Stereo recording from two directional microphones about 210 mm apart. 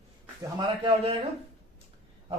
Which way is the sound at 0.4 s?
25° right (ahead or behind).